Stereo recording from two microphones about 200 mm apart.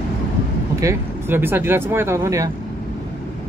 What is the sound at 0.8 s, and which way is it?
Speech, 10° right (ahead or behind).